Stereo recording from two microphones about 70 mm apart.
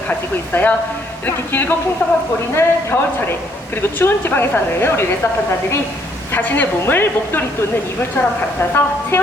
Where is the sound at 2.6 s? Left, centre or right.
Left.